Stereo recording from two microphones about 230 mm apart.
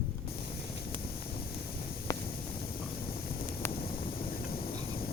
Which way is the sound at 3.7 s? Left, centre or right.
Left.